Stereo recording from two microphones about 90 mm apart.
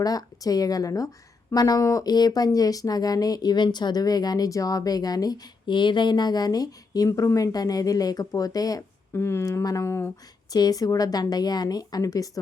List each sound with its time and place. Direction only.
0.0 s a woman's voice: 45° left (ahead or behind)
9.1 s speech: 30° left (ahead or behind)
10.5 s a woman's voice: 45° left (ahead or behind)